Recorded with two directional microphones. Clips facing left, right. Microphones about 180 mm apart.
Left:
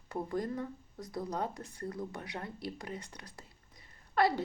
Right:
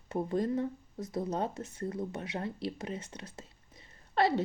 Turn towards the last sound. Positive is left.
turn(degrees=-25)  # may be behind; listen again after turning